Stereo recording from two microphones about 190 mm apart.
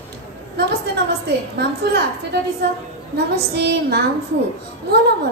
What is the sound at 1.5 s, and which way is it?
Child singing, 60° right (ahead or behind).